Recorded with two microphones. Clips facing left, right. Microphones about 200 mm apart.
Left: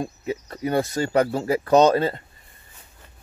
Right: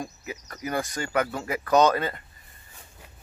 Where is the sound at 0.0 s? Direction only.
25° left (ahead or behind).